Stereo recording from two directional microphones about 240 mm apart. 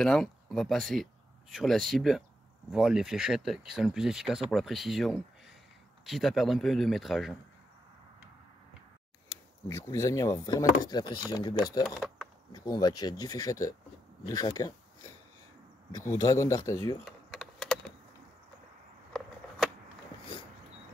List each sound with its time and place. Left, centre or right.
0.0 s speech: centre
9.7 s speech: centre
11.8 s speech: centre
12.5 s speech: centre
15.9 s speech: centre
17.0 s computer keyboard: centre
19.1 s a sound: centre